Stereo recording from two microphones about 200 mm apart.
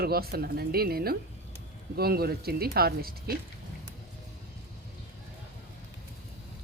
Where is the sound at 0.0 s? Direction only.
50° right (ahead or behind).